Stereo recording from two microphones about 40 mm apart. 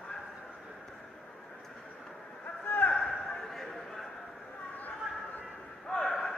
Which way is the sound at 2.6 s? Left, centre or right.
Left.